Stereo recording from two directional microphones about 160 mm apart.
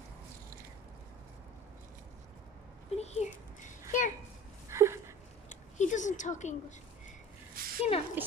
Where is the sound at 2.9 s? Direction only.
45° left (ahead or behind).